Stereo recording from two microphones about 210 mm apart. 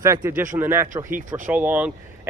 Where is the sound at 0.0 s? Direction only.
15° right (ahead or behind).